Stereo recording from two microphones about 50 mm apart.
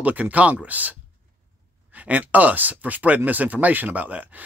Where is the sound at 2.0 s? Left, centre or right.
Right.